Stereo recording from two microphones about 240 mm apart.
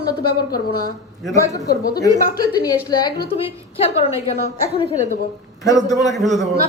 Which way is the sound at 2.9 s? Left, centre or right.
Centre.